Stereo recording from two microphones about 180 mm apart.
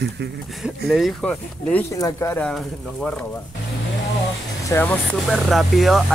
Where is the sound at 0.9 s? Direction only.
Centre (ahead or behind).